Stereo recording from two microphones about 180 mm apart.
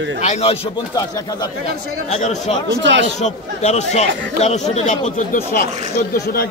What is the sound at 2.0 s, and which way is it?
Speech, 40° left (ahead or behind).